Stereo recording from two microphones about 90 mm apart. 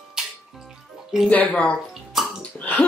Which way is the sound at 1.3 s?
15° left (ahead or behind).